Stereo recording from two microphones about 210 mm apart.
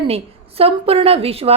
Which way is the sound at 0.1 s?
30° right (ahead or behind).